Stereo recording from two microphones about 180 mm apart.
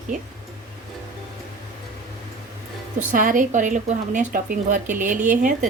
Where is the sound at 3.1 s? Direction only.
50° right (ahead or behind).